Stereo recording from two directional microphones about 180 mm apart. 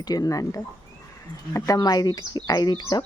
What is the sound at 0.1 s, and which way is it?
Speech, 20° left (ahead or behind).